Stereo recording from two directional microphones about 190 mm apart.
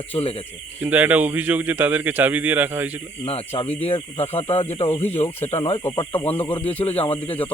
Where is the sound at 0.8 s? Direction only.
10° right (ahead or behind).